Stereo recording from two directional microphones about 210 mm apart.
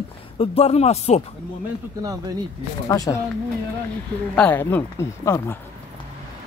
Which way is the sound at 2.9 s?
15° left (ahead or behind).